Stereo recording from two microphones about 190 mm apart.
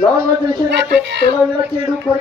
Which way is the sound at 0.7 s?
65° right (ahead or behind).